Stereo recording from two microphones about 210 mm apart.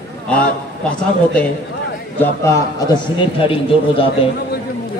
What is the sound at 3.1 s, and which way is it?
Speech, 25° left (ahead or behind).